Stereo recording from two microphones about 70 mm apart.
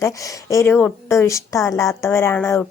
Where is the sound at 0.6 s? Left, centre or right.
Left.